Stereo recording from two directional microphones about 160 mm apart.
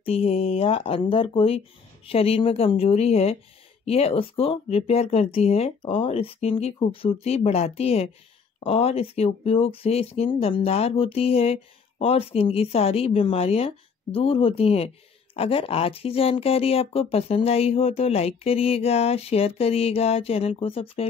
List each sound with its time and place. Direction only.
0.0 s speech: 40° left (ahead or behind)